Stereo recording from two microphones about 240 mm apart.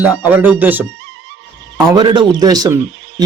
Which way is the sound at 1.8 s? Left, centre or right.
Centre.